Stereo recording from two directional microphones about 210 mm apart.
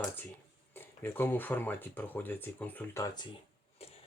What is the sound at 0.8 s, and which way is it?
Speech, 10° left (ahead or behind).